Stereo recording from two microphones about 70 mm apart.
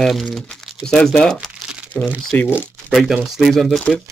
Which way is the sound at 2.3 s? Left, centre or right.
Left.